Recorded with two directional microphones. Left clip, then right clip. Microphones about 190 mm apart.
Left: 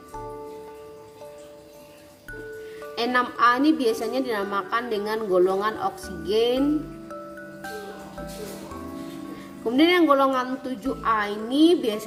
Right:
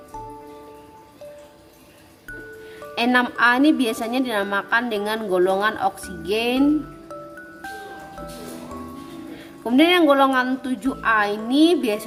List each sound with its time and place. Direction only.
2.9 s a woman's voice: 35° right (ahead or behind)
9.6 s a woman's voice: 30° right (ahead or behind)